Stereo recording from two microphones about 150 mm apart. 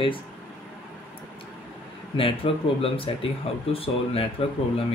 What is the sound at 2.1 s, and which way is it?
Speech, 35° left (ahead or behind).